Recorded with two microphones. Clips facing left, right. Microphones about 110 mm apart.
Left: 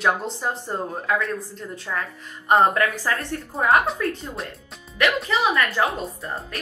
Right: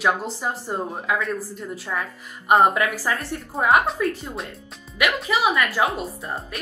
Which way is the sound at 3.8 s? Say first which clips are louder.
Right 1 dB; centre (ahead or behind).